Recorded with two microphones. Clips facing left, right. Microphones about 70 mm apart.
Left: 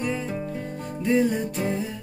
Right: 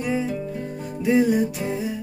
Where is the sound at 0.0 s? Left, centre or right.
Centre.